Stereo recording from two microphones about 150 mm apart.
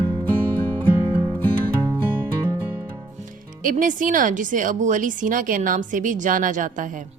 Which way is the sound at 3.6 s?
65° right (ahead or behind).